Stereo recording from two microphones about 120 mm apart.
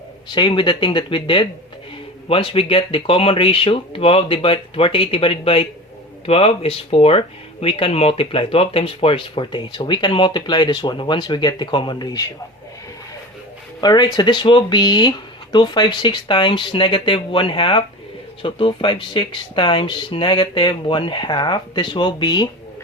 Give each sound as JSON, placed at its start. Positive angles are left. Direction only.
{"t": 0.3, "sound": "speech", "side_deg": 45}
{"t": 13.8, "sound": "speech", "side_deg": 35}